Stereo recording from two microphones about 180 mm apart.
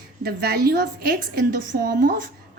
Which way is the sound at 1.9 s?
50° right (ahead or behind).